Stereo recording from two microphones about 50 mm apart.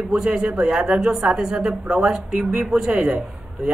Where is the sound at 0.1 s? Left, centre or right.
Centre.